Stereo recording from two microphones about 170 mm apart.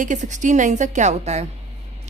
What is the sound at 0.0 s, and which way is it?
Speech, 45° right (ahead or behind).